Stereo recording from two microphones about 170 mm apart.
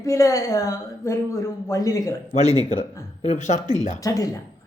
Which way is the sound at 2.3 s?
40° left (ahead or behind).